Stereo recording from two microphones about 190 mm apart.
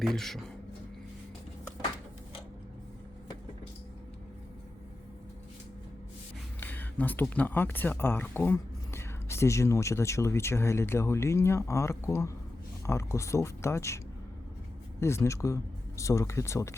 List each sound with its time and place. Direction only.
0.0 s speech: centre (ahead or behind)
6.6 s speech: 10° left (ahead or behind)
15.0 s speech: 15° left (ahead or behind)